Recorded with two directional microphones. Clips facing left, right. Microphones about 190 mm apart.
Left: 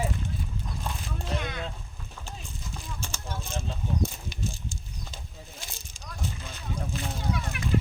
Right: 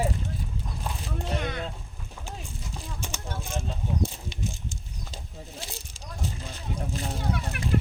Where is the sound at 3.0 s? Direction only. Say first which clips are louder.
Right 2 dB; 15° right (ahead or behind).